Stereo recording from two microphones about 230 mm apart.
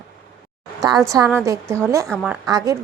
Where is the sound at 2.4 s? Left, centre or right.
Centre.